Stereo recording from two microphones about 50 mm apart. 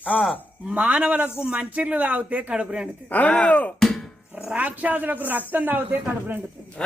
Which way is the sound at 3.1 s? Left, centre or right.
Left.